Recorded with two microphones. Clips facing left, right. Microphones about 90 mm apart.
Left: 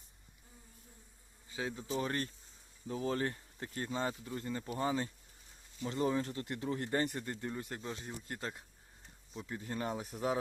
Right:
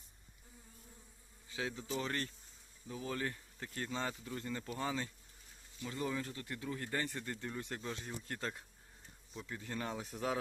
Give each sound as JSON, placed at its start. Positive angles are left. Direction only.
{"t": 2.0, "sound": "speech", "side_deg": 20}
{"t": 2.8, "sound": "speech", "side_deg": 35}
{"t": 7.6, "sound": "speech", "side_deg": 5}
{"t": 9.9, "sound": "speech", "side_deg": 5}